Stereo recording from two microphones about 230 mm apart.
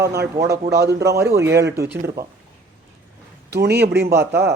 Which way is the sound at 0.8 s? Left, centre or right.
Right.